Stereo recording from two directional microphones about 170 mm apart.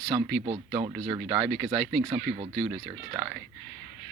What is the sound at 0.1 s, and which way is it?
Speech, 25° right (ahead or behind).